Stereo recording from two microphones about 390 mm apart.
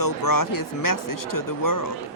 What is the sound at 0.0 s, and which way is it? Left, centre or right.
Speech, left.